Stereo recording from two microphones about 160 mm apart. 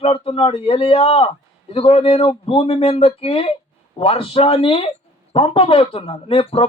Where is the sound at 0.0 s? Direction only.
35° left (ahead or behind).